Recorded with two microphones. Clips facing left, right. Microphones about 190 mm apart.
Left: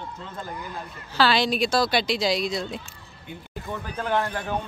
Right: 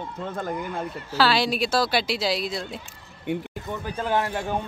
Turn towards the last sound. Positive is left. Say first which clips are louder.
# right 2 dB
turn(degrees=-20)  # may be behind; listen again after turning